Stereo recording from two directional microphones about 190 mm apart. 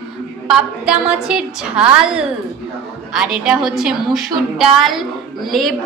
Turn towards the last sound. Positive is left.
turn(degrees=0)  # may be behind; listen again after turning